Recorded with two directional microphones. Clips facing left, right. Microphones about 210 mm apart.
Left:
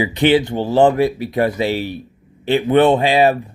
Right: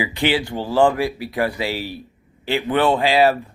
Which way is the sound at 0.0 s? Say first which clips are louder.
Left 6 dB; 20° left (ahead or behind).